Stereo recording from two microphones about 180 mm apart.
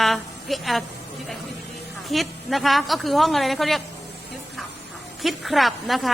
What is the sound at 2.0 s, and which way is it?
A woman's voice, centre (ahead or behind).